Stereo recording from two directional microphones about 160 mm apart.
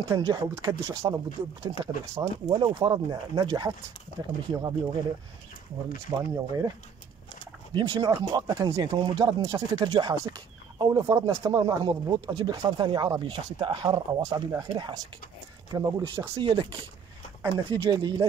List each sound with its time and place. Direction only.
0.2 s speech: 25° right (ahead or behind)
6.0 s speech: 20° right (ahead or behind)
7.7 s speech: 30° right (ahead or behind)